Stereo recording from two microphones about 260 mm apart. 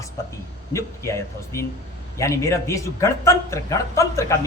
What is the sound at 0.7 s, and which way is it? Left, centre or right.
Speech, centre.